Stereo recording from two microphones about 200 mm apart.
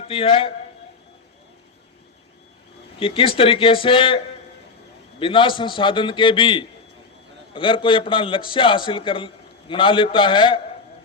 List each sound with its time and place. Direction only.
0.1 s a man's voice: 25° left (ahead or behind)
3.0 s a man's voice: 25° left (ahead or behind)
5.2 s a man's voice: 25° left (ahead or behind)